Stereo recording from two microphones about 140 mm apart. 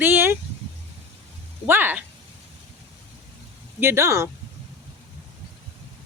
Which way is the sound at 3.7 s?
20° right (ahead or behind).